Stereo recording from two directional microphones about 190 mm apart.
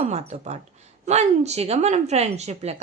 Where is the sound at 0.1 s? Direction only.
35° right (ahead or behind).